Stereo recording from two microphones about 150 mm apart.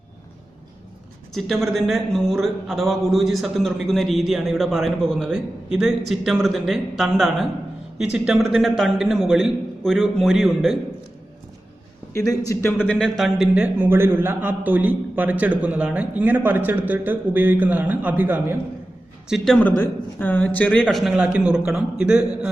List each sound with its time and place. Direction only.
1.3 s a man's voice: centre (ahead or behind)
12.1 s a man's voice: 25° left (ahead or behind)
12.8 s a man's voice: 5° left (ahead or behind)
13.7 s a man's voice: 15° right (ahead or behind)
19.5 s a man's voice: 10° left (ahead or behind); by 22.4 s 5° right (ahead or behind)